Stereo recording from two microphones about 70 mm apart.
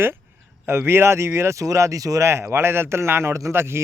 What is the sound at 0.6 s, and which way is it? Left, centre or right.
Speech, right.